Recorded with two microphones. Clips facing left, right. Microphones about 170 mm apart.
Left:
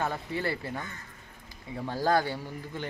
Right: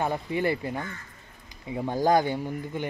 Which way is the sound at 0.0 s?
15° right (ahead or behind).